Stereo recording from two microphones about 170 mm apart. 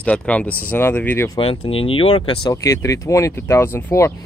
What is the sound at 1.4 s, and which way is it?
Speech, 35° left (ahead or behind).